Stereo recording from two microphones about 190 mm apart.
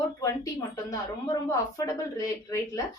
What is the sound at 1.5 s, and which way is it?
Speech, 20° left (ahead or behind).